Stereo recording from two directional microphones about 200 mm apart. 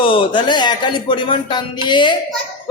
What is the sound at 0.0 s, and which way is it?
Speech, 25° left (ahead or behind).